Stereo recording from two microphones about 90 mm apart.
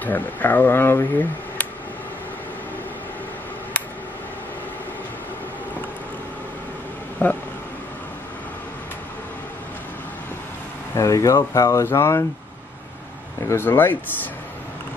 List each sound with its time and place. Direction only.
0.0 s speech: 20° left (ahead or behind)
7.2 s speech: 20° left (ahead or behind)
11.0 s speech: 35° left (ahead or behind)
13.4 s speech: 25° left (ahead or behind)